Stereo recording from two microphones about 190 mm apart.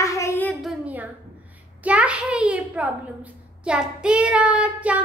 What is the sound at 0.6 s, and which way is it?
A child's voice, 5° right (ahead or behind).